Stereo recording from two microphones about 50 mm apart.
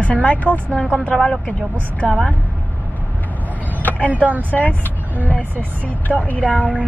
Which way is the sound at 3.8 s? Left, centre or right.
Left.